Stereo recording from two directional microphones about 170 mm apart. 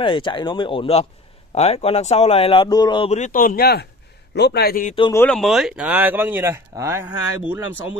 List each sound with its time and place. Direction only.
0.0 s speech: 30° left (ahead or behind)
3.2 s a man's voice: 50° left (ahead or behind); by 4.8 s 70° left (ahead or behind)
5.1 s speech: 10° left (ahead or behind)
5.4 s speech: centre (ahead or behind)